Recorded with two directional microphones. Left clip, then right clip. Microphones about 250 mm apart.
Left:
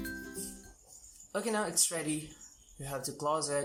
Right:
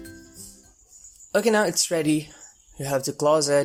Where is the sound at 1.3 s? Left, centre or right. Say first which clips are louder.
Right 12 dB; right.